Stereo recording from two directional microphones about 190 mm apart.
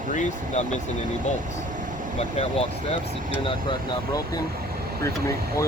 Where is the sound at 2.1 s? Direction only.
30° left (ahead or behind).